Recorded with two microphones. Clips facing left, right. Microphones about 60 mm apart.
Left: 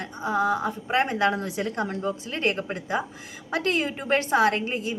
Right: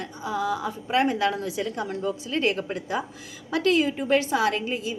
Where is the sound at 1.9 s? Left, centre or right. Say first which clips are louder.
Even; left.